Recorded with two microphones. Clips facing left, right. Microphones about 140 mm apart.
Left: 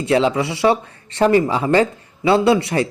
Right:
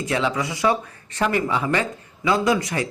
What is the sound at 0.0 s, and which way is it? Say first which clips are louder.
Speech: left 7 dB; 30° left (ahead or behind).